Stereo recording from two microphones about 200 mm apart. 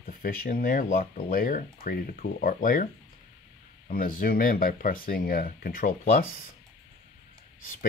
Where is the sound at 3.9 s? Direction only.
45° left (ahead or behind).